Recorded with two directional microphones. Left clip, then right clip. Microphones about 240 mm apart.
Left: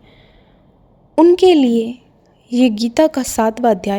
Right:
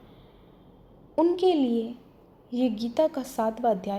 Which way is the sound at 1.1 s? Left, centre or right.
Left.